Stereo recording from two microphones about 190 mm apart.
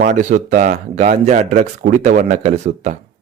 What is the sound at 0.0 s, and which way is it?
A man's voice, 40° right (ahead or behind).